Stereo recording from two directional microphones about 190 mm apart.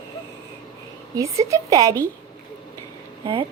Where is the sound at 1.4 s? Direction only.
15° right (ahead or behind).